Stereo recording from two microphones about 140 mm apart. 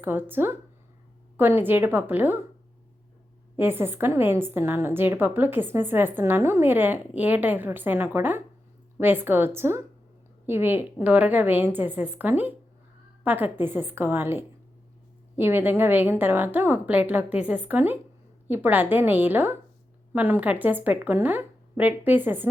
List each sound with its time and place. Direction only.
0.0 s a woman's voice: 15° right (ahead or behind)
3.6 s a woman's voice: 15° right (ahead or behind)